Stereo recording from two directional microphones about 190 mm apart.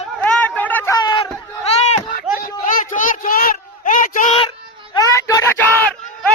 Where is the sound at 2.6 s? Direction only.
40° left (ahead or behind).